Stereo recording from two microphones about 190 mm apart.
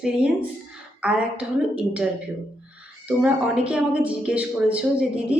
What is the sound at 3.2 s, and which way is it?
Speech, 5° right (ahead or behind).